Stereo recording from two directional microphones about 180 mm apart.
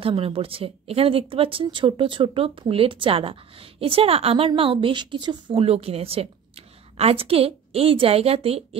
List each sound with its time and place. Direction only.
0.0 s speech: 30° right (ahead or behind)